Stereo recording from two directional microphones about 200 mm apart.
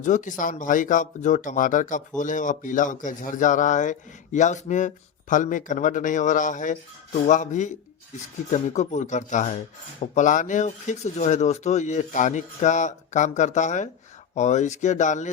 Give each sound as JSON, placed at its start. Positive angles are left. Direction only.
{"t": 0.0, "sound": "speech", "side_deg": 40}